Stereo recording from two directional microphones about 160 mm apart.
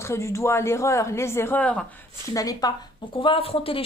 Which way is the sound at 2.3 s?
20° left (ahead or behind).